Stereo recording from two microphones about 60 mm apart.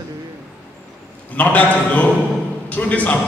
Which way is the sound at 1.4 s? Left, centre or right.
Left.